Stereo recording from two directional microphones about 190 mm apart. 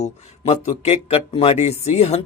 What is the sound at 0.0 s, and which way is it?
A man's voice, 35° left (ahead or behind).